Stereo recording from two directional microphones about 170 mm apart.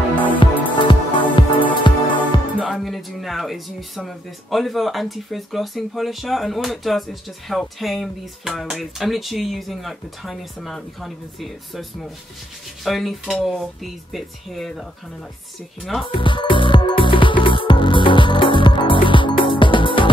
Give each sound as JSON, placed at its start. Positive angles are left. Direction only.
{"t": 0.3, "sound": "music", "side_deg": 30}
{"t": 2.6, "sound": "speech", "side_deg": 0}
{"t": 15.8, "sound": "speech", "side_deg": 0}
{"t": 16.1, "sound": "music", "side_deg": 30}